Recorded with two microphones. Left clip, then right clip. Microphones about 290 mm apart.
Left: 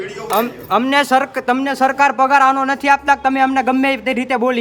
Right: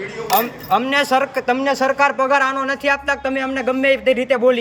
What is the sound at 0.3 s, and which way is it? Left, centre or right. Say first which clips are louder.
Speech: even; centre.